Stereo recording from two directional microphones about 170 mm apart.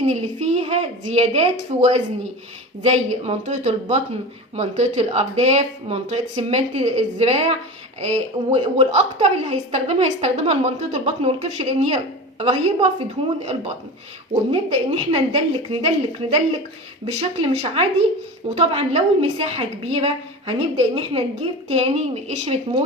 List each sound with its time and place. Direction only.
0.0 s a woman's voice: 40° right (ahead or behind)
17.1 s a woman's voice: 35° right (ahead or behind)